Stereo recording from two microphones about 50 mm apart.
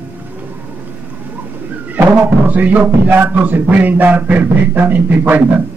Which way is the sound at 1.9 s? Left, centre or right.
Right.